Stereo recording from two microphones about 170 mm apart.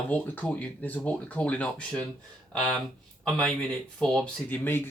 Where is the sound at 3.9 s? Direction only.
5° left (ahead or behind).